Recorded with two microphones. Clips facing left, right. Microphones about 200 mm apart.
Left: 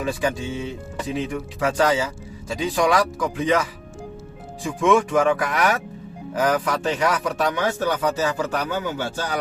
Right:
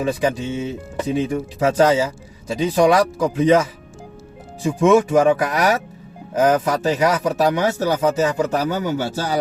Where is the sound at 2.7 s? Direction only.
35° right (ahead or behind).